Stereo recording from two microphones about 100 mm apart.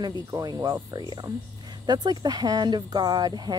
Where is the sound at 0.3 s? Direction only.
40° right (ahead or behind).